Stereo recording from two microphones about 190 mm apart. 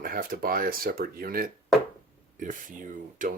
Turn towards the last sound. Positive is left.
turn(degrees=-45)  # may be behind; listen again after turning